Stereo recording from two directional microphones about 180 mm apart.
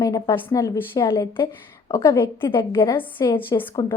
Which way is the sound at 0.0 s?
15° left (ahead or behind).